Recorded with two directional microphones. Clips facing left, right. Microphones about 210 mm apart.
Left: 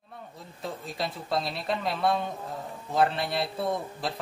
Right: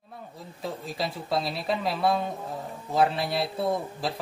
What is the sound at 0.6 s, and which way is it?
Speech, centre (ahead or behind).